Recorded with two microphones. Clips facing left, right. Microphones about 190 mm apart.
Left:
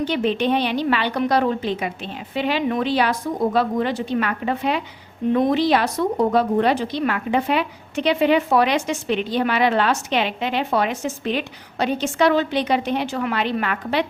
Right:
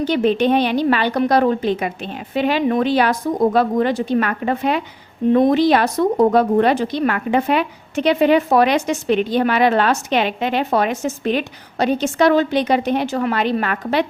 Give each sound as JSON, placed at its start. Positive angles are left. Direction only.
{"t": 0.0, "sound": "a woman's voice", "side_deg": -45}